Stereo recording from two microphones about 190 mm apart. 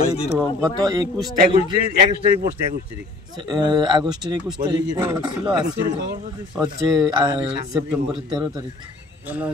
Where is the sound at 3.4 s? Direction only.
25° right (ahead or behind).